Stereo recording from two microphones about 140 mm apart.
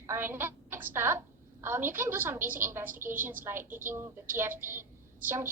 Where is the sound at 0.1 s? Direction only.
15° right (ahead or behind).